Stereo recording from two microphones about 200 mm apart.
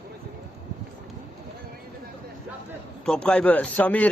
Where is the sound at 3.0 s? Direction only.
5° left (ahead or behind).